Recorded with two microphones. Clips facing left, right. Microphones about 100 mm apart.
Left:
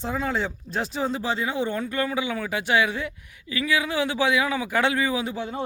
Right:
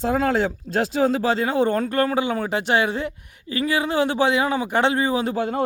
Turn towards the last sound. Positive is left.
turn(degrees=-60)  # may be behind; listen again after turning